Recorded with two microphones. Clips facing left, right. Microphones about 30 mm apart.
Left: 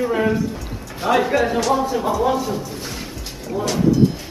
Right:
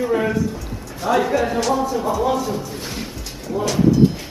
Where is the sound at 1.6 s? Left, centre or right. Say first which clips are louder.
Left 1 dB; centre.